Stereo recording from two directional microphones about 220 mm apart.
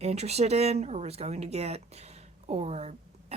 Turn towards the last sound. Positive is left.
turn(degrees=-30)  # may be behind; listen again after turning